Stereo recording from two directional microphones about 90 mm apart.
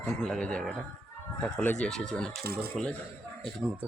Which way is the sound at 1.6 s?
20° left (ahead or behind).